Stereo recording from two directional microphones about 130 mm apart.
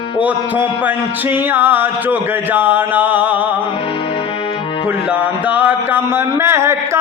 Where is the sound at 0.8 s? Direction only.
15° right (ahead or behind).